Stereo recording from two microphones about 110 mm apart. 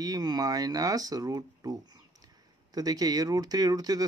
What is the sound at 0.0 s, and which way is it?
Speech, 35° right (ahead or behind).